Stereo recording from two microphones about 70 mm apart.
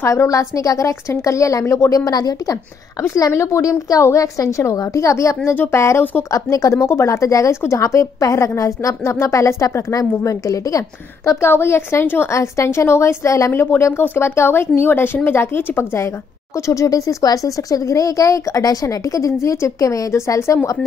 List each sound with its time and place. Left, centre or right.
0.0 s a woman's voice: left
2.0 s speech: left
3.2 s a woman's voice: left
6.3 s a woman's voice: left
11.2 s a woman's voice: left
12.3 s a woman's voice: left
13.5 s a woman's voice: left
16.5 s a woman's voice: left